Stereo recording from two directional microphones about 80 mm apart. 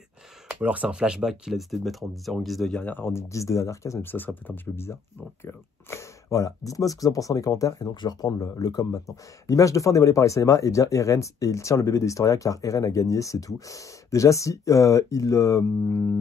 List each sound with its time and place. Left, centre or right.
0.6 s speech: centre
2.7 s speech: centre
3.1 s speech: left
4.0 s speech: left
7.9 s speech: left